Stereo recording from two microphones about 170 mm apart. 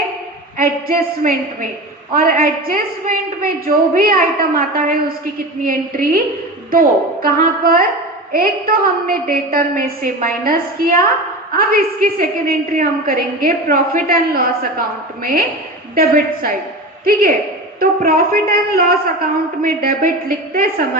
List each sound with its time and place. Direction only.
0.6 s a woman's voice: 55° right (ahead or behind)